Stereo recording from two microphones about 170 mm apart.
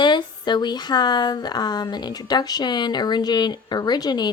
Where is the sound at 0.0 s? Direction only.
25° left (ahead or behind).